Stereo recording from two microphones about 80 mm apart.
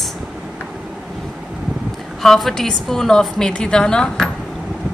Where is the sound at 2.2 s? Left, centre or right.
Centre.